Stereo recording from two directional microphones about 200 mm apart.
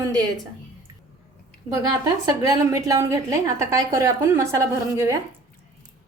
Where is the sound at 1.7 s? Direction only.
20° right (ahead or behind).